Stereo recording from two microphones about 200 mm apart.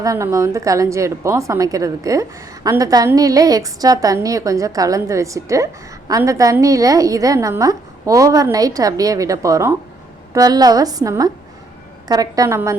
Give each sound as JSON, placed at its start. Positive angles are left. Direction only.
{"t": 0.0, "sound": "a woman's voice", "side_deg": -15}